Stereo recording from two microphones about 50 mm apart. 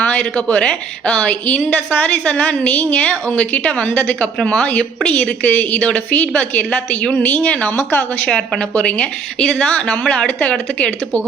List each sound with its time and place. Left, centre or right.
0.0 s a woman's voice: left
7.8 s speech: left
8.3 s a woman's voice: left